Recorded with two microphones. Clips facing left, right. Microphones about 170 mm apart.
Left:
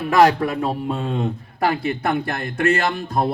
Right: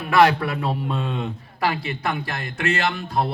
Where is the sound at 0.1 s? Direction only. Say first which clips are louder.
Left 2 dB; 40° left (ahead or behind).